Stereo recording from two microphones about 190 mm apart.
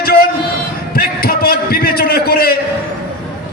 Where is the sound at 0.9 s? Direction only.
50° left (ahead or behind).